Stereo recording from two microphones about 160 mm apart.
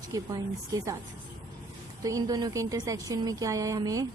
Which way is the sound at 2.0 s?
20° right (ahead or behind).